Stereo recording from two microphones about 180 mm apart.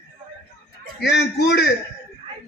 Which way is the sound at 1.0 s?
70° left (ahead or behind).